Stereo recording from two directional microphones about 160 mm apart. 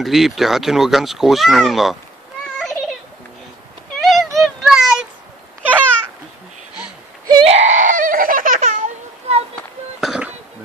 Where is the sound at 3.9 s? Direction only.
Centre (ahead or behind).